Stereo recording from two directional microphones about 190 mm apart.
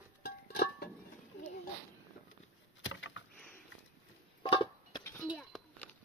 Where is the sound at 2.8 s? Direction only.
85° left.